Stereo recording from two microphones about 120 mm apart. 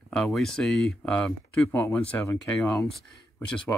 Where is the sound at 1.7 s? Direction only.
20° left (ahead or behind).